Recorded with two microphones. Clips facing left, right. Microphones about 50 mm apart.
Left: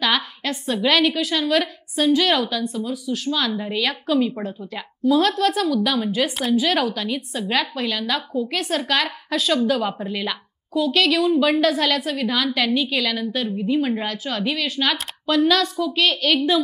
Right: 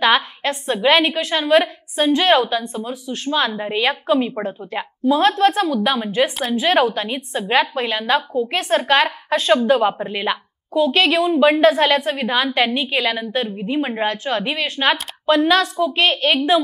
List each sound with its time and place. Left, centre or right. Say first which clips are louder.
0.0 s a woman's voice: right 5 dB; right